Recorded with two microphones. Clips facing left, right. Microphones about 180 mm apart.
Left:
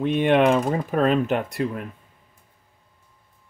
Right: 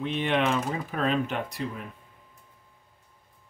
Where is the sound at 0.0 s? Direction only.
55° left (ahead or behind).